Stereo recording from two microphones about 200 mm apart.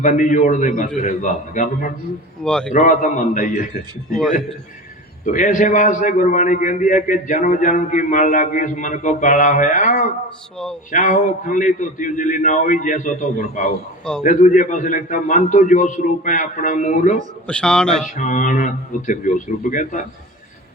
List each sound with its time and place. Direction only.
0.0 s a man's voice: 40° left (ahead or behind)
2.4 s a man's voice: 5° left (ahead or behind)
2.7 s a man's voice: 40° left (ahead or behind)
5.2 s a man's voice: 40° left (ahead or behind)
17.4 s a man's voice: 5° left (ahead or behind)
18.2 s a man's voice: 40° left (ahead or behind)